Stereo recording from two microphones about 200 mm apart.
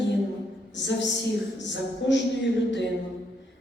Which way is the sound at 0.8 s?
65° left (ahead or behind).